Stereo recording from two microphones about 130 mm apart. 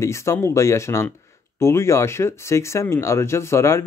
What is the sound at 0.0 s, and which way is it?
Speech, 20° left (ahead or behind).